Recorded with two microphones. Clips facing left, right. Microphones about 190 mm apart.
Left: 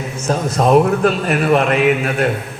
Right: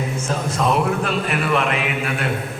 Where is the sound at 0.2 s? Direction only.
40° left (ahead or behind).